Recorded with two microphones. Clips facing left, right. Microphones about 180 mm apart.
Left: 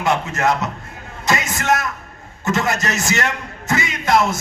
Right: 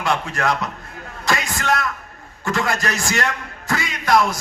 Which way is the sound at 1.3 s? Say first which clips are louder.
Left 2 dB; 20° left (ahead or behind).